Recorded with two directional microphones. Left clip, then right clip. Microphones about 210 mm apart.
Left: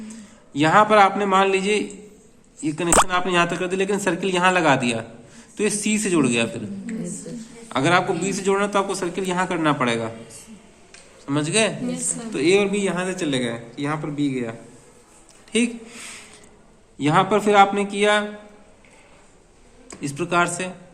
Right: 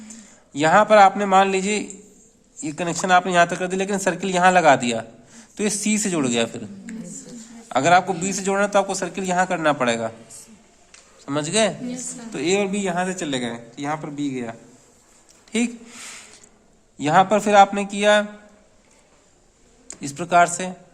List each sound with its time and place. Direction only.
0.0 s a man's voice: 60° right (ahead or behind)
7.7 s speech: 60° right (ahead or behind)
11.3 s speech: 60° right (ahead or behind)
15.5 s speech: 60° right (ahead or behind)
20.0 s speech: 55° right (ahead or behind)